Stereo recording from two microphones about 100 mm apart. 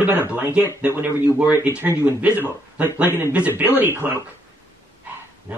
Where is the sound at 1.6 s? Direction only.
20° right (ahead or behind).